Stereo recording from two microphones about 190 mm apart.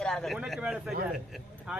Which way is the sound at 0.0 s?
Centre (ahead or behind).